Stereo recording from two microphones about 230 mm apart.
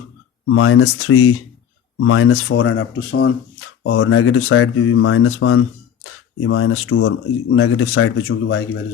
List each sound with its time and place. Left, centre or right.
0.5 s speech: left
3.8 s speech: left